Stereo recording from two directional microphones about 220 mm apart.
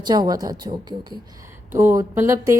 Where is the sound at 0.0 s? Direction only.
20° right (ahead or behind).